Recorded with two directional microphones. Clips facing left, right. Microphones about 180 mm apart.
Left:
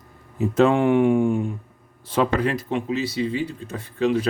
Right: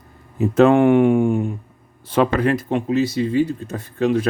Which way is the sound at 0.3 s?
55° right (ahead or behind).